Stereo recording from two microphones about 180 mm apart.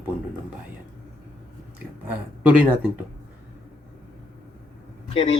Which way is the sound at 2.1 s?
5° right (ahead or behind).